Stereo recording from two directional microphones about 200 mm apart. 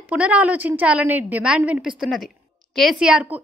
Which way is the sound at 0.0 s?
5° right (ahead or behind).